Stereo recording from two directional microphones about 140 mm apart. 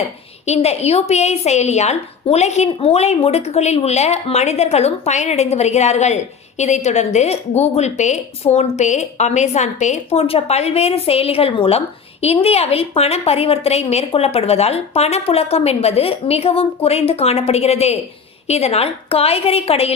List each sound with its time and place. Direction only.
0.0 s a woman's voice: 50° left (ahead or behind)